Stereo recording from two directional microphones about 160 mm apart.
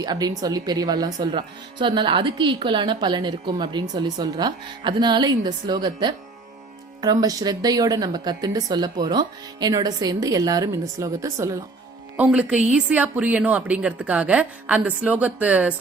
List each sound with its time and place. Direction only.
0.0 s speech: 25° right (ahead or behind)
12.1 s a woman's voice: 10° right (ahead or behind)